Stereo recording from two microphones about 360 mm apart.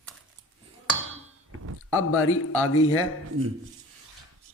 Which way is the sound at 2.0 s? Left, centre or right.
Left.